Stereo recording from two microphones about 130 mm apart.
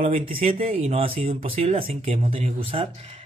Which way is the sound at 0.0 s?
50° right (ahead or behind).